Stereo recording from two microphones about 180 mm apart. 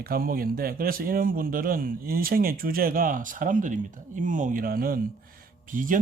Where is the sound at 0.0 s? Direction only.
55° right (ahead or behind).